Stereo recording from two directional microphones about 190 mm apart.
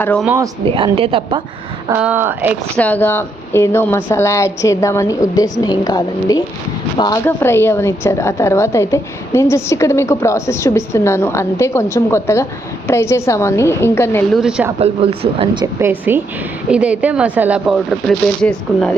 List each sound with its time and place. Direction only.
0.0 s a woman's voice: 5° left (ahead or behind)
0.3 s speech: 15° right (ahead or behind)
0.8 s a woman's voice: 30° right (ahead or behind)
1.9 s speech: 10° right (ahead or behind)
2.7 s a woman's voice: 10° left (ahead or behind)
14.3 s speech: 5° right (ahead or behind)
14.8 s speech: 30° right (ahead or behind)
15.6 s speech: 10° right (ahead or behind); by 18.9 s 5° left (ahead or behind)